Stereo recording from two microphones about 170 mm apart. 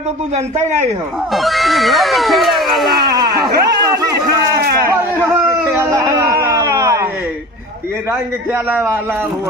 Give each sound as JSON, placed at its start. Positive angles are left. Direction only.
{"t": 0.6, "sound": "speech", "side_deg": -45}
{"t": 1.3, "sound": "speech", "side_deg": 0}
{"t": 3.3, "sound": "speech", "side_deg": -70}
{"t": 5.2, "sound": "a sound", "side_deg": -20}
{"t": 8.6, "sound": "speech", "side_deg": -15}